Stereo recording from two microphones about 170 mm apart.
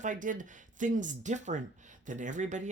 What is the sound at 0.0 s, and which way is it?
Speech, 50° right (ahead or behind).